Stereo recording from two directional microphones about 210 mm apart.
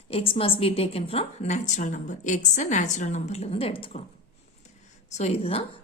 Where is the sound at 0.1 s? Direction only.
25° left (ahead or behind).